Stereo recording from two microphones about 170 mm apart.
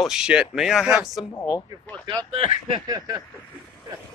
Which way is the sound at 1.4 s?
20° left (ahead or behind).